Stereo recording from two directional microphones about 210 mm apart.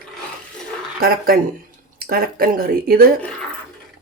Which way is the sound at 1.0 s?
45° right (ahead or behind).